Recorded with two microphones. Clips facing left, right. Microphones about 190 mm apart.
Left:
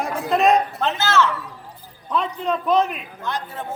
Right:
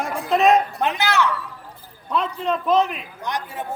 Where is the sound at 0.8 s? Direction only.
15° right (ahead or behind).